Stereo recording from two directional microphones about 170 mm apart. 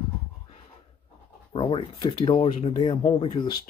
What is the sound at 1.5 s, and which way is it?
Speech, 35° left (ahead or behind).